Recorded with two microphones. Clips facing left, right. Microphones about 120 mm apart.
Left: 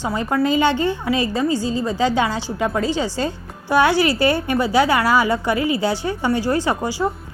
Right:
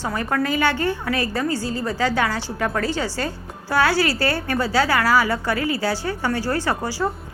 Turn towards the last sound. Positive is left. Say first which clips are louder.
# left 3 dB
turn(degrees=15)  # may be behind; listen again after turning